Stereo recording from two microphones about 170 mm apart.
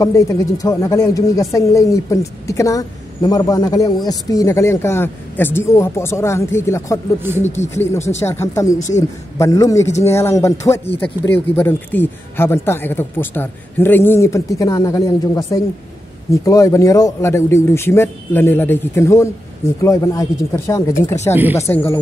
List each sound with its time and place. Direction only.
0.0 s speech: 20° left (ahead or behind)
7.4 s speech: 40° left (ahead or behind)
7.7 s speech: 15° left (ahead or behind)
8.7 s speech: 45° left (ahead or behind)
9.4 s speech: 20° left (ahead or behind)